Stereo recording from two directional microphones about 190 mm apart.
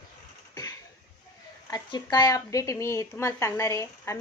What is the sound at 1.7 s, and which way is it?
A woman's voice, 20° left (ahead or behind).